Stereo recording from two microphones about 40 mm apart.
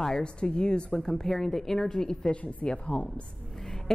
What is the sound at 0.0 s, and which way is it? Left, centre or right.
Speech, left.